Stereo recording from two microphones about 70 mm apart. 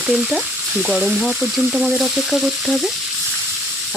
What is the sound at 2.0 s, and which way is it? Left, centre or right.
Speech, centre.